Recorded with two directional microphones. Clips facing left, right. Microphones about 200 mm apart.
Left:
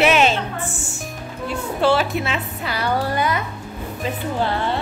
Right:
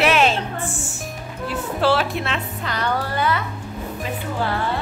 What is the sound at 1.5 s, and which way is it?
A woman's voice, centre (ahead or behind).